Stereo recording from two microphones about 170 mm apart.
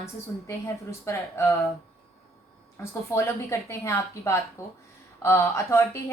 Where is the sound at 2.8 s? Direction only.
15° left (ahead or behind).